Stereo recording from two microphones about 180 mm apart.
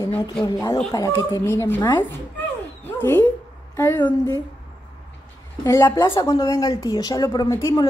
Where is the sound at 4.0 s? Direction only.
25° left (ahead or behind).